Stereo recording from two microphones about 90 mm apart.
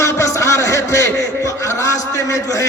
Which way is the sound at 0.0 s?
35° left (ahead or behind).